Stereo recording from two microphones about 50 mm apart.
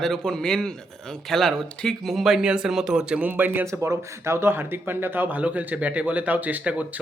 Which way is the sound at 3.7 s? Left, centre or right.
Right.